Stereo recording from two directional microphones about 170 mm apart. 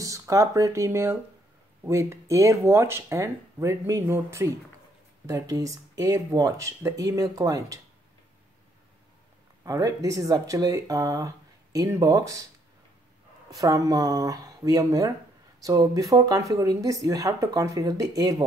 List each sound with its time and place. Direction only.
0.0 s speech: 20° right (ahead or behind)
9.7 s speech: 20° right (ahead or behind)
13.5 s speech: 20° right (ahead or behind)